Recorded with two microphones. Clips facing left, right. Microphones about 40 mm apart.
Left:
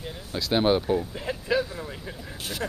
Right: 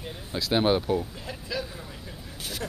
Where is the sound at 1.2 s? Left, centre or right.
Left.